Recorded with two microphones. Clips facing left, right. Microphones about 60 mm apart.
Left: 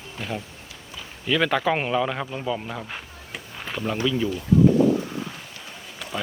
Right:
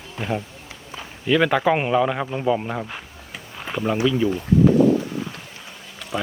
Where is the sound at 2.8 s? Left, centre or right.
Centre.